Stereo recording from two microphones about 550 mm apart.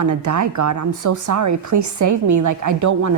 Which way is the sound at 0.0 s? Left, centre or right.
Right.